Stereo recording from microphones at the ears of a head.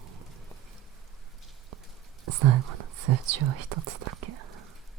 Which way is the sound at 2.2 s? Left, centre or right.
Right.